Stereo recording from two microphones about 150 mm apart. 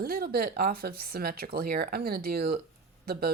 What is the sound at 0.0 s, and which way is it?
Speech, 90° right.